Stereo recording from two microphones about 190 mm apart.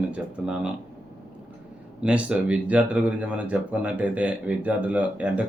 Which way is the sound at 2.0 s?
5° right (ahead or behind).